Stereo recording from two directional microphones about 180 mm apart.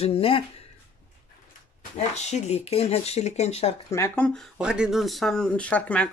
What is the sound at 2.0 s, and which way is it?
Speech, 40° left (ahead or behind).